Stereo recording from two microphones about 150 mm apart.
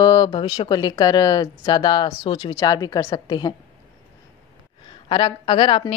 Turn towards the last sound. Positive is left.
turn(degrees=35)  # may be behind; listen again after turning